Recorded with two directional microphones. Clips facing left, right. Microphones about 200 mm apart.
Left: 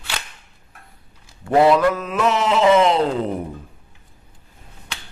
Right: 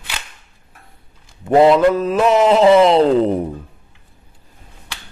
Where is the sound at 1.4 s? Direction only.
20° right (ahead or behind).